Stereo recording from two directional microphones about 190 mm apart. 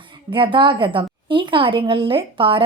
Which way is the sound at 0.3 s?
25° right (ahead or behind).